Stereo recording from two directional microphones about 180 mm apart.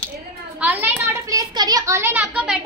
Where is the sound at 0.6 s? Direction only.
10° right (ahead or behind).